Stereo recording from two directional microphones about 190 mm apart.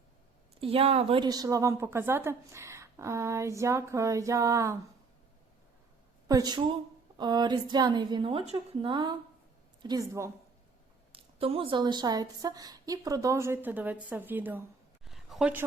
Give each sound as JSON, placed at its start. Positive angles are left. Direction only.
{"t": 0.6, "sound": "a woman's voice", "side_deg": -30}
{"t": 6.2, "sound": "a woman's voice", "side_deg": -20}
{"t": 11.1, "sound": "a woman's voice", "side_deg": -30}
{"t": 15.0, "sound": "a sound", "side_deg": 0}